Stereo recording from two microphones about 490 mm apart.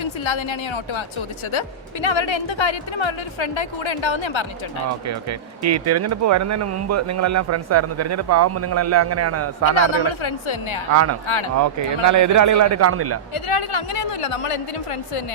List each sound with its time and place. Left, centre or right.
0.0 s a woman's voice: left
5.0 s speech: right
9.7 s a woman's voice: left
10.9 s speech: right
13.3 s speech: left